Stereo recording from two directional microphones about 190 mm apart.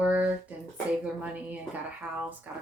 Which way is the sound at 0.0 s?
5° right (ahead or behind).